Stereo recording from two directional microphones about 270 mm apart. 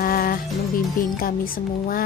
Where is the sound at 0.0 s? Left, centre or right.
Left.